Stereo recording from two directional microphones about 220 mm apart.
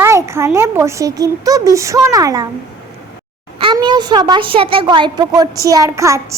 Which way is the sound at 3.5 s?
20° right (ahead or behind).